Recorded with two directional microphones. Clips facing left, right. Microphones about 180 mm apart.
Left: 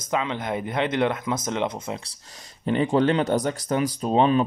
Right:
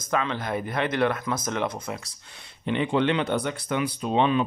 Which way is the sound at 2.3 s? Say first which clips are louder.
Left 3 dB; 40° left (ahead or behind).